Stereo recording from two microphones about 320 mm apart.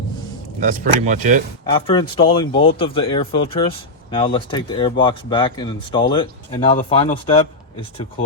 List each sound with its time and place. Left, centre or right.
0.6 s speech: right
1.9 s speech: centre